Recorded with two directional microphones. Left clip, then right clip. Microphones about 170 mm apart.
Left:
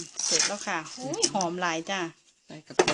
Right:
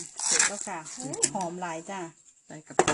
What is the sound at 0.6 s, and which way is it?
Speech, 10° left (ahead or behind).